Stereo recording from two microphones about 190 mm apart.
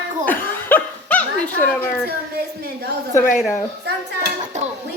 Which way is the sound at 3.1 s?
45° left (ahead or behind).